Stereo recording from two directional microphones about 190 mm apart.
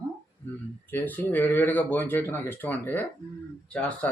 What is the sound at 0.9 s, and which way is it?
Speech, 10° left (ahead or behind).